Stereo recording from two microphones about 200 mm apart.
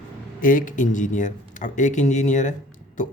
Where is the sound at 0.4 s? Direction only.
40° left (ahead or behind).